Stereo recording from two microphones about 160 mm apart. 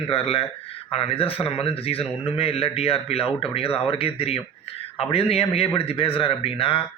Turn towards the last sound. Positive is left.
turn(degrees=35)  # may be behind; listen again after turning